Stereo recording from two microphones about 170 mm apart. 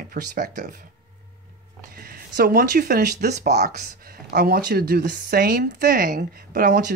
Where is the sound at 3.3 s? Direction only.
45° right (ahead or behind).